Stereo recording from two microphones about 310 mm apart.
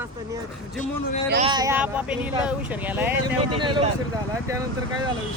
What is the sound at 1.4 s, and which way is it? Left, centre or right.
Speech, centre.